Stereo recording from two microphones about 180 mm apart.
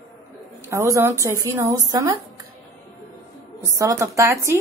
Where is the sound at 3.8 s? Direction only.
20° right (ahead or behind).